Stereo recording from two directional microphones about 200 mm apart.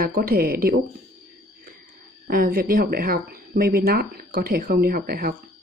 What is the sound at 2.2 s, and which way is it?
A woman's voice, 45° right (ahead or behind).